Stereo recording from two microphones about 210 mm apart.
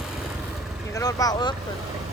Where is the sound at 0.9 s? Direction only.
15° left (ahead or behind).